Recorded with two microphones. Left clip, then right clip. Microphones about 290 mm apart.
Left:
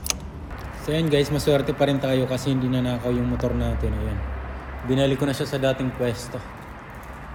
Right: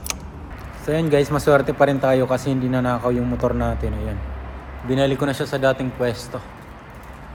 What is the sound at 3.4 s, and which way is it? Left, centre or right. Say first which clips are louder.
A man's voice: right 5 dB; centre.